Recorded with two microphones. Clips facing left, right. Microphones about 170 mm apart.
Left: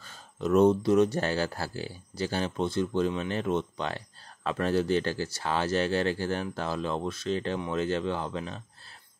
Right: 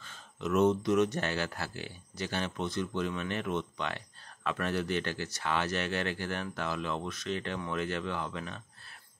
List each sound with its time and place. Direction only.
0.0 s speech: 35° left (ahead or behind)